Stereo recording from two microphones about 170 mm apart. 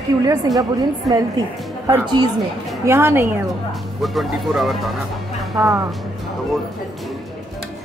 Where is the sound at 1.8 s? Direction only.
25° right (ahead or behind).